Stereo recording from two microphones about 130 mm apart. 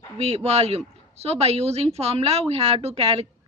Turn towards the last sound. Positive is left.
turn(degrees=-50)  # may be behind; listen again after turning